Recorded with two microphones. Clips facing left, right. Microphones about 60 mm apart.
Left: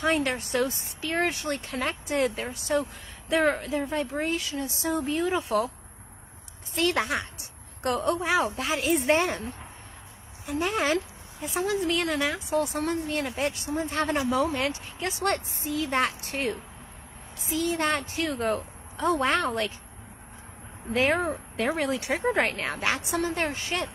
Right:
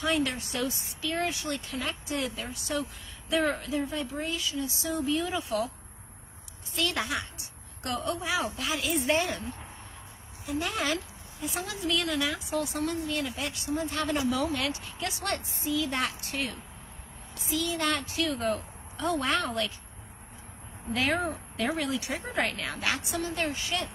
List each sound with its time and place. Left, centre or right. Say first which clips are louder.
0.0 s speech: left 3 dB; left
6.7 s speech: left 5 dB; left
10.6 s speech: left 6 dB; left
20.9 s speech: left 4 dB; left